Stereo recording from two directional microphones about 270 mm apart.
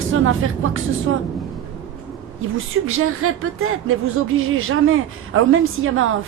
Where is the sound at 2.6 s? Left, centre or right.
Right.